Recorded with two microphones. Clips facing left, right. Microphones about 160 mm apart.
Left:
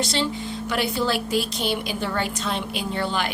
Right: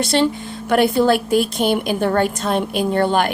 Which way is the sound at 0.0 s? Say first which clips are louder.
Right 7 dB; 55° right (ahead or behind).